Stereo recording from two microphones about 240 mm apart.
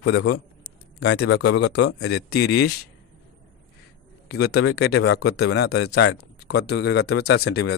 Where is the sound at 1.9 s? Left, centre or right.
Left.